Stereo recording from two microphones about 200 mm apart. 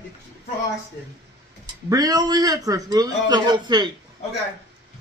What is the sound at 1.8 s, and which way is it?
A man's voice, 20° right (ahead or behind).